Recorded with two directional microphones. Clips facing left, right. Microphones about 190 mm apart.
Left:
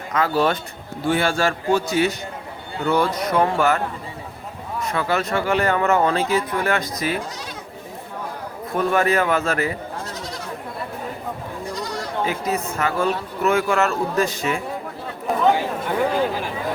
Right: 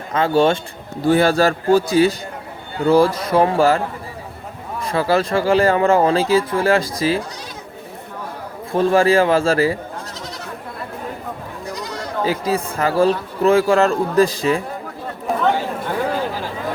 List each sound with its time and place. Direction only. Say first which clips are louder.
0.1 s a man's voice: right 4 dB; 30° right (ahead or behind)
1.0 s a man's voice: right 6 dB; 40° right (ahead or behind)
4.8 s speech: right 5 dB; 35° right (ahead or behind)
8.7 s a man's voice: right 5 dB; 30° right (ahead or behind)
12.2 s speech: right 5 dB; 30° right (ahead or behind)
15.3 s chatter: right 1 dB; centre (ahead or behind)